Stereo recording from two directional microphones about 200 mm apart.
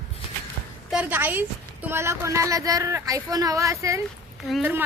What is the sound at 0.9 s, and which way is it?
A woman's voice, 10° right (ahead or behind).